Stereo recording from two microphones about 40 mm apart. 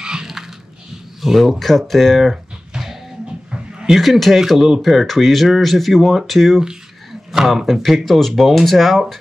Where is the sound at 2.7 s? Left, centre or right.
Centre.